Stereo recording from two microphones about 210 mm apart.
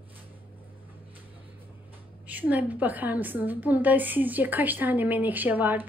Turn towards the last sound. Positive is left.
turn(degrees=-10)  # may be behind; listen again after turning